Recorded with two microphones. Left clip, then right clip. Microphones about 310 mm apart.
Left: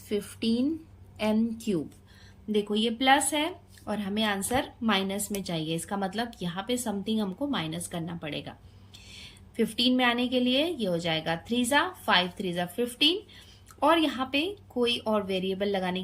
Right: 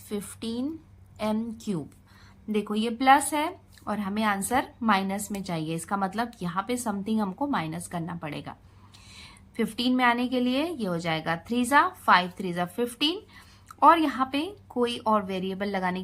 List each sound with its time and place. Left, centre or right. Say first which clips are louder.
0.1 s a woman's voice: left 5 dB; right
2.5 s a woman's voice: left 1 dB; centre